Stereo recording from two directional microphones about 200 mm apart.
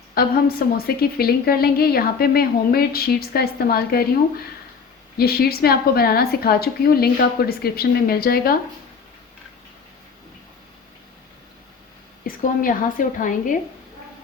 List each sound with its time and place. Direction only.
0.1 s a woman's voice: 50° left (ahead or behind)
5.1 s a woman's voice: 50° left (ahead or behind)
12.2 s a woman's voice: 45° left (ahead or behind)